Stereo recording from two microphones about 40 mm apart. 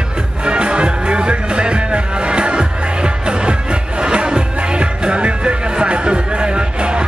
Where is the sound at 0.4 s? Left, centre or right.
Right.